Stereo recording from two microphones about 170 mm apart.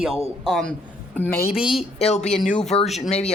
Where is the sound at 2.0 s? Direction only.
40° left (ahead or behind).